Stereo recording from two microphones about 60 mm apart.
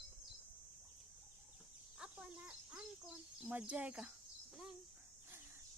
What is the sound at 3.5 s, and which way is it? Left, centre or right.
Speech, right.